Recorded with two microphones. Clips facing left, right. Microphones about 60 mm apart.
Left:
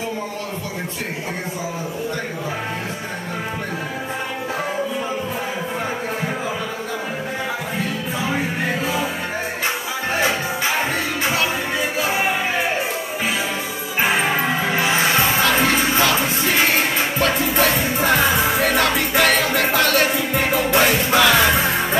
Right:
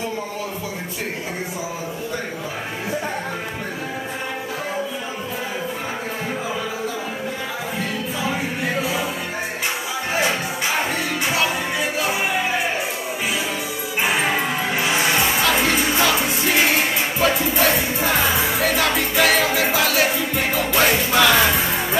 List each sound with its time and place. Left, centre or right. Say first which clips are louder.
14.0 s music: left 2 dB; left
15.5 s music: left 2 dB; centre